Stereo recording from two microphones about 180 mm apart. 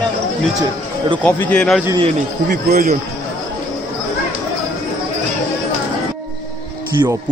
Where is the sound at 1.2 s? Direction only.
10° left (ahead or behind).